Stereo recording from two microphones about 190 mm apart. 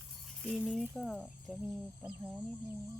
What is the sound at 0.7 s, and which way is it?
Speech, 5° left (ahead or behind).